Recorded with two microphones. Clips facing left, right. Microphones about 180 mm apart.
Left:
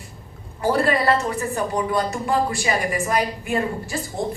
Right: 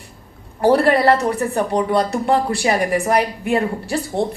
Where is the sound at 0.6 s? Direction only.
65° right (ahead or behind).